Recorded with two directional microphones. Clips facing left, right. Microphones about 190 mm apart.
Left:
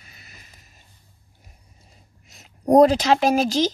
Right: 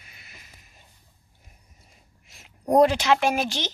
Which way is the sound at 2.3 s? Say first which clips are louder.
Left 5 dB; 40° left (ahead or behind).